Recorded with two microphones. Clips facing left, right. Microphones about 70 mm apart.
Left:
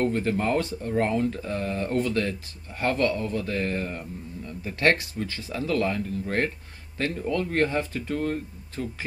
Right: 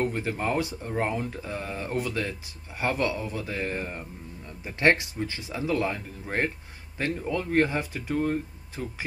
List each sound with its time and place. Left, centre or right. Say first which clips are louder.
0.0 s speech: left 3 dB; centre